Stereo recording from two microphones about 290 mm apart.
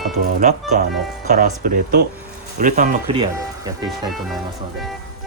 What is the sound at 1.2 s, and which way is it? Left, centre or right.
Speech, right.